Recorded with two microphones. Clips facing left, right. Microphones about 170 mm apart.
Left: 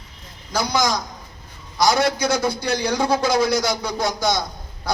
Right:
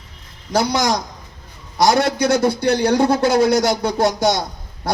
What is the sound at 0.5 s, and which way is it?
A man's voice, 65° right (ahead or behind).